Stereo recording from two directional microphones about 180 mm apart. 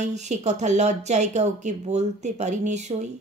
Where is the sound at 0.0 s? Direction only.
40° right (ahead or behind).